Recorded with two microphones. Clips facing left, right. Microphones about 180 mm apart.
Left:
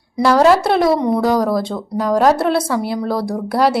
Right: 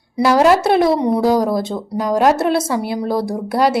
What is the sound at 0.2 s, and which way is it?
A woman's voice, 5° right (ahead or behind).